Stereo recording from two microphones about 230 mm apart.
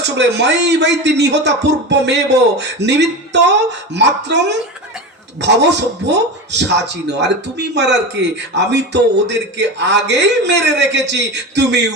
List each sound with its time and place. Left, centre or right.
0.0 s speech: right